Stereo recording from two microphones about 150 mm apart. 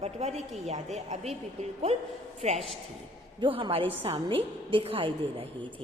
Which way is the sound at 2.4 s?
45° right (ahead or behind).